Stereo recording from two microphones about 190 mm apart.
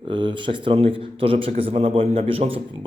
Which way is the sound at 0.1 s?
25° right (ahead or behind).